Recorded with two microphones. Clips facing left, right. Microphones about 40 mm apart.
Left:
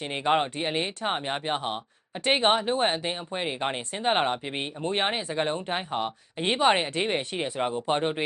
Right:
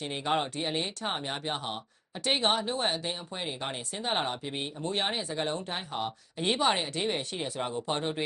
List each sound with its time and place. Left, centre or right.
0.0 s speech: left